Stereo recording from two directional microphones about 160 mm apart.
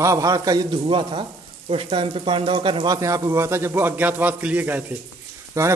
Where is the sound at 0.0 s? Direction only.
20° right (ahead or behind).